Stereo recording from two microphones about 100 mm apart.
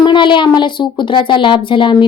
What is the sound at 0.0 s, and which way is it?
A woman's voice, 50° left (ahead or behind).